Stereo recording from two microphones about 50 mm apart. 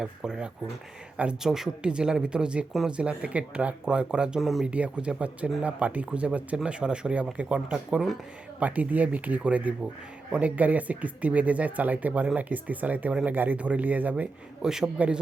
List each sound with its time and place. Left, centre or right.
0.0 s speech: centre
1.4 s speech: centre
4.4 s speech: centre
4.6 s speech: right
8.5 s speech: right
14.6 s speech: centre
14.9 s speech: right